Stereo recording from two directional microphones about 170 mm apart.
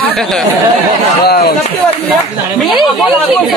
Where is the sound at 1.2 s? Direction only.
65° left (ahead or behind).